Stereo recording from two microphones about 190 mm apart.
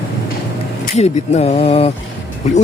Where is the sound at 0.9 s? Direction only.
35° left (ahead or behind).